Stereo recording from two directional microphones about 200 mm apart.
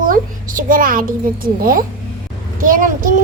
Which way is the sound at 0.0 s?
45° right (ahead or behind).